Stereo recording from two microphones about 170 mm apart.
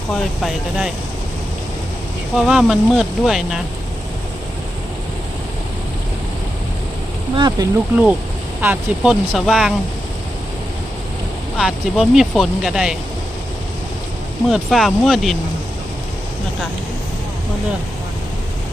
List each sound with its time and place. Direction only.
0.1 s speech: centre (ahead or behind)
2.3 s speech: 5° right (ahead or behind)
7.3 s speech: 25° right (ahead or behind)
8.6 s speech: 10° right (ahead or behind)
11.5 s speech: centre (ahead or behind)
14.5 s speech: centre (ahead or behind)